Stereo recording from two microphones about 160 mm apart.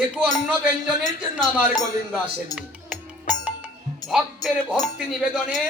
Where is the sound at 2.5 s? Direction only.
25° left (ahead or behind).